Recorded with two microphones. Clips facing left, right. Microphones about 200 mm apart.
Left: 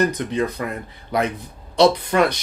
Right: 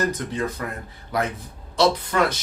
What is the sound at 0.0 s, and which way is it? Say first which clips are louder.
Speech: left 4 dB; 15° left (ahead or behind).